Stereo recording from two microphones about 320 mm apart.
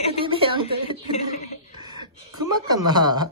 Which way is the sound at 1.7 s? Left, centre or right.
Centre.